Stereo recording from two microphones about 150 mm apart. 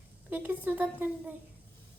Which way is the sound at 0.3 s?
10° right (ahead or behind).